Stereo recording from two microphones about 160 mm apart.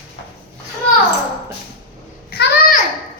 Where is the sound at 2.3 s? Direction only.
70° left (ahead or behind).